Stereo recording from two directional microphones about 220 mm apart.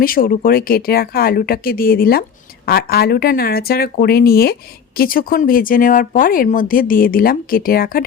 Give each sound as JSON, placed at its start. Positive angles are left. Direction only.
{"t": 0.0, "sound": "speech", "side_deg": 40}